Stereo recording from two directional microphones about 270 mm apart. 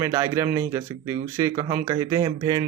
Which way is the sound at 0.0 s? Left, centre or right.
Centre.